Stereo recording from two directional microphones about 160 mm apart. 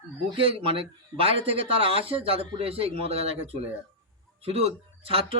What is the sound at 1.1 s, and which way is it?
A man's voice, 35° right (ahead or behind).